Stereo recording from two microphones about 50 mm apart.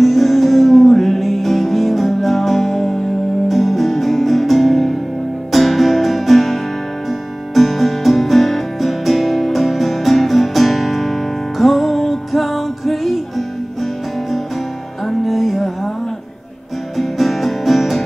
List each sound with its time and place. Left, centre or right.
0.0 s music: centre
15.0 s music: centre
16.9 s music: centre